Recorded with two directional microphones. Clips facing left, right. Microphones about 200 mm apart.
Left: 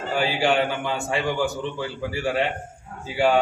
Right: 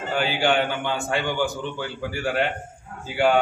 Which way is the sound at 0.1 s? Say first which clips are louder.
Even; centre (ahead or behind).